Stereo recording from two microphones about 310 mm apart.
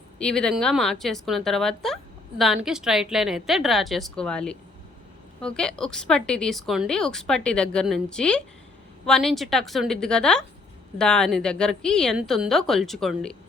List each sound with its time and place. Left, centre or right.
0.2 s speech: centre